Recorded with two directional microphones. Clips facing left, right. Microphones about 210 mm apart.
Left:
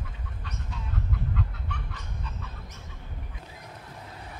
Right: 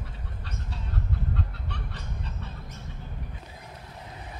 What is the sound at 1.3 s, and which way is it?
Chicken, 35° right (ahead or behind).